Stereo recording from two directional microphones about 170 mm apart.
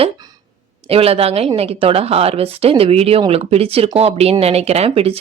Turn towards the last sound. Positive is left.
turn(degrees=-35)  # may be behind; listen again after turning